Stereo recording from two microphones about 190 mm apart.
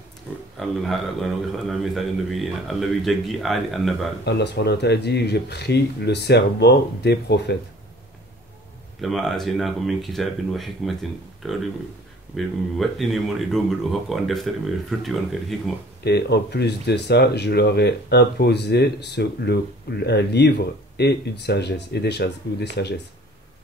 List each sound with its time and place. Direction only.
0.3 s a sound: 5° right (ahead or behind)
0.6 s a man's voice: centre (ahead or behind)
4.2 s speech: 60° left (ahead or behind)
9.0 s a man's voice: centre (ahead or behind)
12.4 s a man's voice: centre (ahead or behind)
16.0 s speech: 60° left (ahead or behind)